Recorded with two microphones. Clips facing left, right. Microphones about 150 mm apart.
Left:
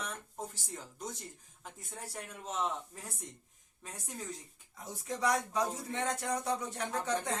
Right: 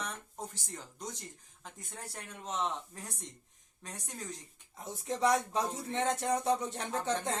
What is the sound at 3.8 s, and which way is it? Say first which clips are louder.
Speech: even; 5° left (ahead or behind).